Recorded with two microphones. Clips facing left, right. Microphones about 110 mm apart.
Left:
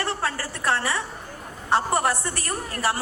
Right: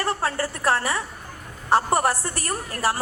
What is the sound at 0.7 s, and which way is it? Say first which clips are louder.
Speech: right 1 dB; 25° left (ahead or behind).